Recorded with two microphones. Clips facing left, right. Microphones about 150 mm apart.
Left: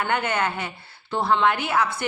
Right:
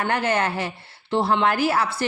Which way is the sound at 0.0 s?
30° right (ahead or behind).